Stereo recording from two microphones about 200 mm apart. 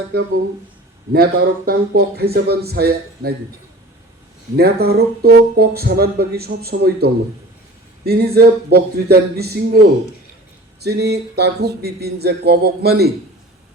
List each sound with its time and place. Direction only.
0.1 s speech: 55° right (ahead or behind)
4.5 s speech: 50° right (ahead or behind)
10.8 s speech: 55° right (ahead or behind)